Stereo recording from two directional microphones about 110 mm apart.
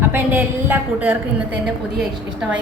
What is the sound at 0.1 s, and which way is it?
A woman's voice, 15° right (ahead or behind).